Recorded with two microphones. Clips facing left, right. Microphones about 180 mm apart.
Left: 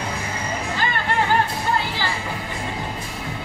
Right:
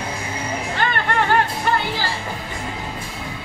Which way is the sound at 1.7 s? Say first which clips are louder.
Right 2 dB; 90° right.